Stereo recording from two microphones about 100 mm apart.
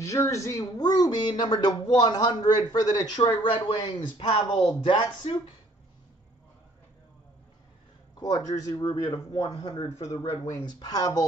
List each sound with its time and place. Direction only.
0.0 s speech: 30° left (ahead or behind)
3.2 s speech: 55° left (ahead or behind)
8.5 s speech: 40° left (ahead or behind)
9.4 s speech: 70° left (ahead or behind)
10.6 s speech: 45° left (ahead or behind)